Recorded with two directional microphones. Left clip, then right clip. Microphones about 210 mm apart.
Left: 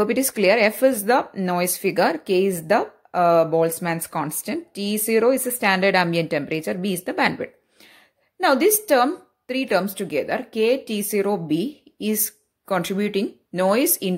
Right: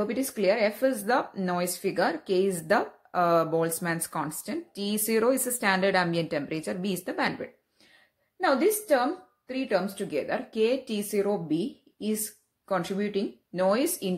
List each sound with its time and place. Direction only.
0.0 s a woman's voice: 35° left (ahead or behind)